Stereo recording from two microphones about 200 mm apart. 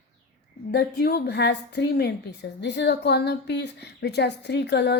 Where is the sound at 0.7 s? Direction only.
50° left (ahead or behind).